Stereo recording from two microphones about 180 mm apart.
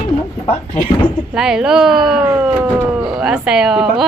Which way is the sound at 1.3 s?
5° right (ahead or behind).